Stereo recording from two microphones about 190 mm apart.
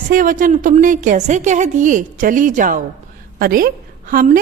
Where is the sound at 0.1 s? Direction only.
45° right (ahead or behind).